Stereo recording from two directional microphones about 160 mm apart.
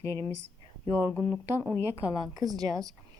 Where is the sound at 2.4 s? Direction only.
25° right (ahead or behind).